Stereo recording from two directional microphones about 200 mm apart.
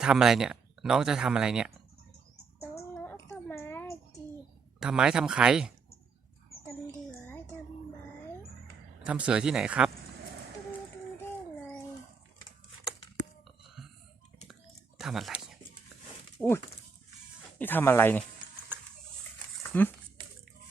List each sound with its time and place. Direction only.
0.0 s speech: centre (ahead or behind)
2.6 s child singing: 10° left (ahead or behind)
4.8 s speech: 5° right (ahead or behind)
7.3 s a sound: 10° left (ahead or behind)
9.0 s speech: 5° right (ahead or behind)
14.9 s a sound: centre (ahead or behind)
16.4 s speech: 10° left (ahead or behind)
17.6 s speech: 10° left (ahead or behind)
19.7 s speech: 10° left (ahead or behind)
20.2 s a sound: 25° right (ahead or behind)